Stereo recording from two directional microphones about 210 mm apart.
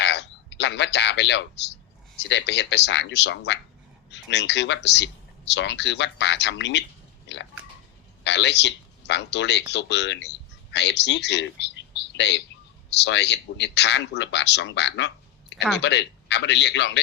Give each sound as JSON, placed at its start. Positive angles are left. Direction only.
{"t": 0.0, "sound": "a man's voice", "side_deg": 55}